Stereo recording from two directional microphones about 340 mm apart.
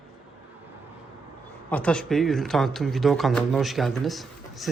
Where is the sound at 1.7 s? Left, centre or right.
Centre.